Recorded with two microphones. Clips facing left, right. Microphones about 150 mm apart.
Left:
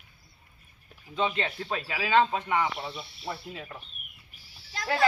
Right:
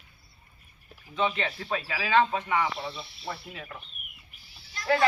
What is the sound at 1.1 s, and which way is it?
Speech, 20° left (ahead or behind).